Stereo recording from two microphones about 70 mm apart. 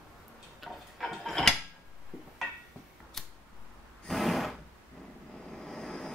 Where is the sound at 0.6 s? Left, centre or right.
Centre.